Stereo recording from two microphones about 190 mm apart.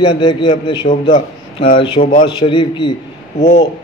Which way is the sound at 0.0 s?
25° left (ahead or behind).